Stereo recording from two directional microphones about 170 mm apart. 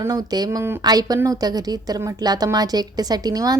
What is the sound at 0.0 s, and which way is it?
Speech, 20° right (ahead or behind).